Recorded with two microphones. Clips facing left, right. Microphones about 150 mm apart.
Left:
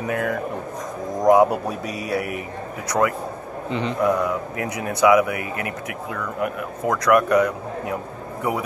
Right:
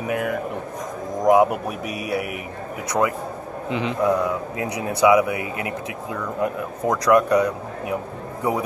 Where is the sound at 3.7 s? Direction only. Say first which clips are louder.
Even; centre (ahead or behind).